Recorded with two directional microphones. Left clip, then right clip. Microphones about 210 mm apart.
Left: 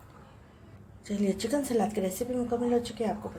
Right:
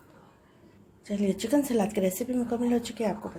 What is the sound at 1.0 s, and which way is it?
A woman's voice, 15° right (ahead or behind).